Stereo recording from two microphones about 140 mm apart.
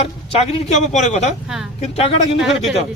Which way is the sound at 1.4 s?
5° right (ahead or behind).